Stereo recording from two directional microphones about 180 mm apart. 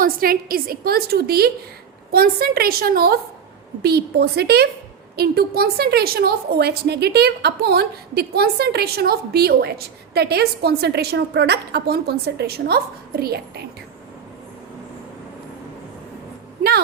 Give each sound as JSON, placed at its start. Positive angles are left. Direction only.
{"t": 0.0, "sound": "a woman's voice", "side_deg": -55}